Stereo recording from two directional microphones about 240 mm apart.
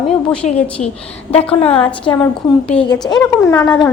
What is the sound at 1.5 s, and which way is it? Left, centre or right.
Speech, left.